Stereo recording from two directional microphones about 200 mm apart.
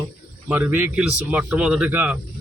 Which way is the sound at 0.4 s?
10° right (ahead or behind).